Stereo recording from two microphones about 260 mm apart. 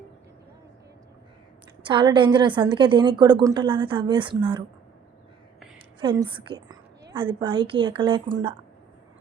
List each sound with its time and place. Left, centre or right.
1.8 s a woman's voice: centre
6.0 s a woman's voice: centre